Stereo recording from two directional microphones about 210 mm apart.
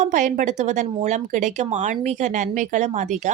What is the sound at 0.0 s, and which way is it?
Speech, 35° right (ahead or behind).